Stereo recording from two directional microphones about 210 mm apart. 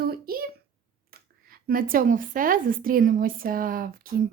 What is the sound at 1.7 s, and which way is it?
Speech, 45° right (ahead or behind).